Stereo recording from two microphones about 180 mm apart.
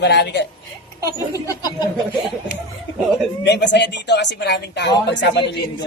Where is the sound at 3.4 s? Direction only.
75° left (ahead or behind).